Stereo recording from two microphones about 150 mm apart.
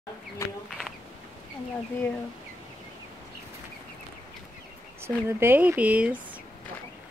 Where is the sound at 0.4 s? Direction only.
20° left (ahead or behind).